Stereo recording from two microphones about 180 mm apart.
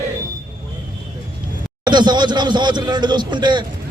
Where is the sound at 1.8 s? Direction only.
25° right (ahead or behind).